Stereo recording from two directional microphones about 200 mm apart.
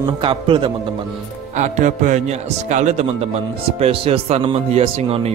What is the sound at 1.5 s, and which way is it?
Speech, 35° right (ahead or behind).